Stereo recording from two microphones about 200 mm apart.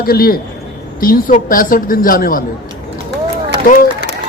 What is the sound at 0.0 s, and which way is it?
Speech, 50° left (ahead or behind).